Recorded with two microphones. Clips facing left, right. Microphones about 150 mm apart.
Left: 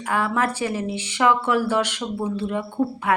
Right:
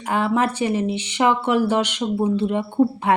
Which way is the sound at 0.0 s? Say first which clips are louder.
Right 3 dB; 20° right (ahead or behind).